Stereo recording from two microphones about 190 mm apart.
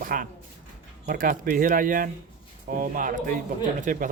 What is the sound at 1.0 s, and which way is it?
Speech, 45° right (ahead or behind).